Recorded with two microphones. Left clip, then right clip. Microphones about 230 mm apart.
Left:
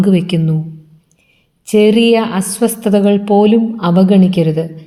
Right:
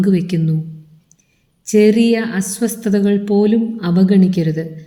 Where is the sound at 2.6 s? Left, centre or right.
Left.